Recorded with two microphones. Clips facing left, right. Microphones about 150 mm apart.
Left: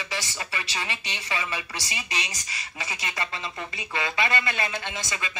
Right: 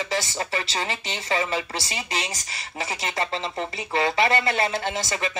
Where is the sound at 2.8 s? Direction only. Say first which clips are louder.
Right 6 dB; 30° right (ahead or behind).